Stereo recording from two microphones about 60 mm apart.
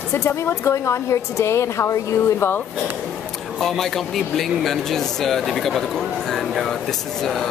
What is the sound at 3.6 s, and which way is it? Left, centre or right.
Speech, centre.